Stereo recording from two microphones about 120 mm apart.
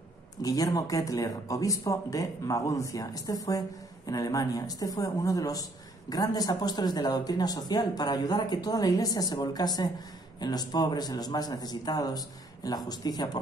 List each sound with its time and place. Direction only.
0.4 s speech: 30° left (ahead or behind)